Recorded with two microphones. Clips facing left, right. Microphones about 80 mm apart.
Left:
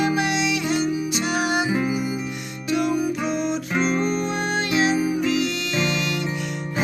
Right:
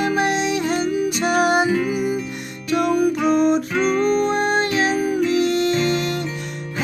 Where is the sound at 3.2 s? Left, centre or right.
Right.